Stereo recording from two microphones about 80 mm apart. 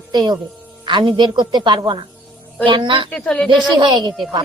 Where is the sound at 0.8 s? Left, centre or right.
Right.